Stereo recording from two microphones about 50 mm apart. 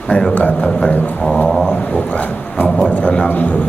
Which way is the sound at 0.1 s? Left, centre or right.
Left.